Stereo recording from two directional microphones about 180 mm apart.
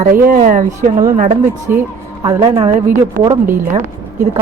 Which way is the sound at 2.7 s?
50° right (ahead or behind).